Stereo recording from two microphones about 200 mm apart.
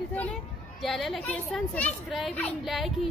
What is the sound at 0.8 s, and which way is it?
A child's voice, centre (ahead or behind).